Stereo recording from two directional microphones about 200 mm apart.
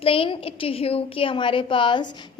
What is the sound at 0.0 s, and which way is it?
A child's voice, 25° left (ahead or behind).